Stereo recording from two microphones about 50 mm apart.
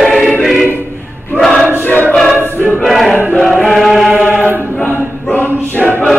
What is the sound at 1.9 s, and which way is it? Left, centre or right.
Choir, left.